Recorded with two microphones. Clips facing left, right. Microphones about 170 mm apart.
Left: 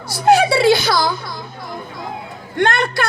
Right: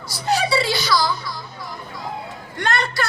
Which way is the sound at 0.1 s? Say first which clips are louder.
Left 7 dB; 55° left (ahead or behind).